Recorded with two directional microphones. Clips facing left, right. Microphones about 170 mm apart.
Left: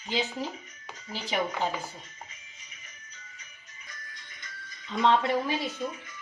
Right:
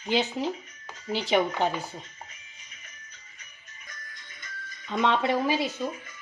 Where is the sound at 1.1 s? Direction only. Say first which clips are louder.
Right 6 dB; 75° right (ahead or behind).